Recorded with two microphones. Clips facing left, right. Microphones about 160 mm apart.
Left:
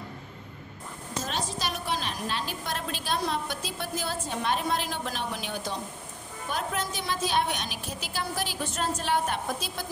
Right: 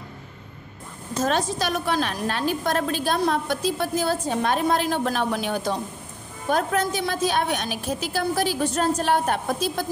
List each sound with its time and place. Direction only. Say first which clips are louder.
1.2 s a woman's voice: right 10 dB; 55° right (ahead or behind)